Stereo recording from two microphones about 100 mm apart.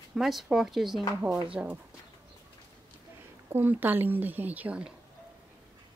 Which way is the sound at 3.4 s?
20° right (ahead or behind).